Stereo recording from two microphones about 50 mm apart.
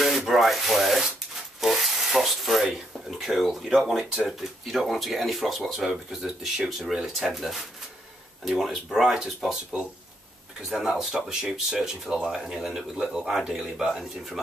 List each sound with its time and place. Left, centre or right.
0.3 s rub: centre
4.3 s speech: centre